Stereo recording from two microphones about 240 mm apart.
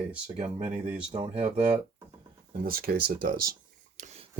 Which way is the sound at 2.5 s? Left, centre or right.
Right.